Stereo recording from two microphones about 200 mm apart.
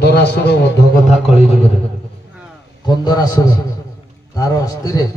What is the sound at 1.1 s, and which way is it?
Speech, 30° left (ahead or behind).